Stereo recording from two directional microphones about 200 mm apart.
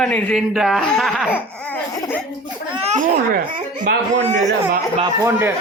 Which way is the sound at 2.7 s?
30° right (ahead or behind).